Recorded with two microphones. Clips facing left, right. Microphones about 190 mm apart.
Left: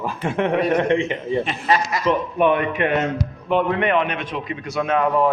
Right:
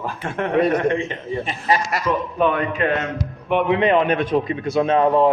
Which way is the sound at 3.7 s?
30° right (ahead or behind).